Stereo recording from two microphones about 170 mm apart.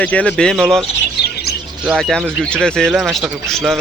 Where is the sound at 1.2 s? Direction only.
70° left (ahead or behind).